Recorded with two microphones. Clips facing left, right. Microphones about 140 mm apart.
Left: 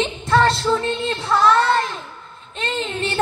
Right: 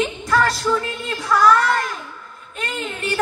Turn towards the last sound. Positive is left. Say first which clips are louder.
# left 2 dB
turn(degrees=25)  # may be behind; listen again after turning